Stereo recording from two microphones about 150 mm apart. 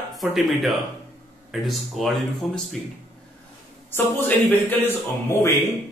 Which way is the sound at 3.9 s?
15° left (ahead or behind).